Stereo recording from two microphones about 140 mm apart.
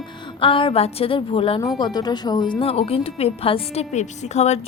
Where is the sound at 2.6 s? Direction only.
45° left (ahead or behind).